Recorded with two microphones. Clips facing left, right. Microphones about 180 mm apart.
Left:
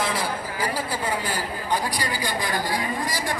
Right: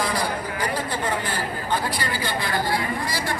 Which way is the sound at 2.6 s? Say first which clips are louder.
Right 1 dB; 15° left (ahead or behind).